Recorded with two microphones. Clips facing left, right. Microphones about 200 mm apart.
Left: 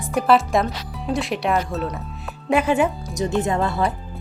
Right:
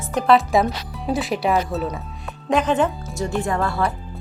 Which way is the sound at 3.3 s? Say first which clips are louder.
Left 1 dB; 20° left (ahead or behind).